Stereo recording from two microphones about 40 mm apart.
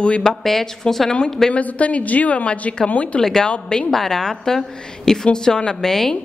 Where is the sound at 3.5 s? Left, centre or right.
Left.